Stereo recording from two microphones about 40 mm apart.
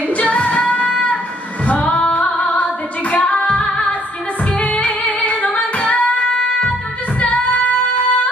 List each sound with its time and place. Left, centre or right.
0.1 s singing: left
1.7 s music: left
2.3 s female singing: left
4.6 s music: left
7.2 s female singing: left